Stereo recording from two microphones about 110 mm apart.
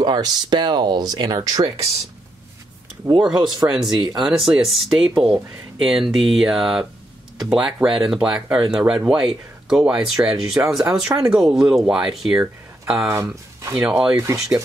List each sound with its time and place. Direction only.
0.0 s speech: 40° right (ahead or behind)
3.0 s speech: 35° right (ahead or behind)
4.2 s speech: 5° right (ahead or behind)
14.1 s speech: 25° right (ahead or behind)